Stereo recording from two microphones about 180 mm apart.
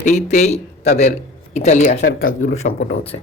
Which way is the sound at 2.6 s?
50° left (ahead or behind).